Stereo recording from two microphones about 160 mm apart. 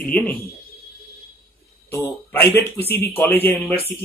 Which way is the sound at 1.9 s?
15° left (ahead or behind).